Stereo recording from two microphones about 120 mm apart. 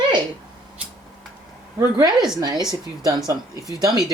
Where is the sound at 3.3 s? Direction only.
30° right (ahead or behind).